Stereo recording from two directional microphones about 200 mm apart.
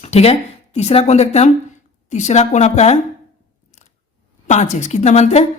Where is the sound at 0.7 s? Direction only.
35° left (ahead or behind).